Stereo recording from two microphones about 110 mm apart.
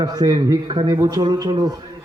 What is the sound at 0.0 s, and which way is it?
A man's voice, 35° right (ahead or behind).